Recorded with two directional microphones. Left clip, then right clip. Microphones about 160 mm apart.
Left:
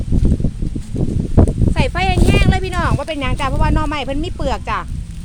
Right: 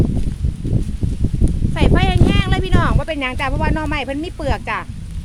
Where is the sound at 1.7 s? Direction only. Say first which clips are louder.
Right 1 dB; 20° left (ahead or behind).